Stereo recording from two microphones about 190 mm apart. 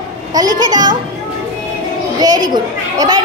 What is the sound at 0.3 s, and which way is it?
Speech, 20° right (ahead or behind).